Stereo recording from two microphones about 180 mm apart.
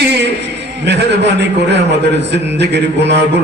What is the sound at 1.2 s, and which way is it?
Mantra, 75° right (ahead or behind).